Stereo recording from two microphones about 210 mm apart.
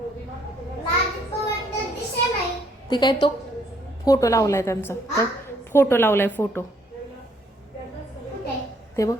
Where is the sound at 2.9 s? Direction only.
20° left (ahead or behind).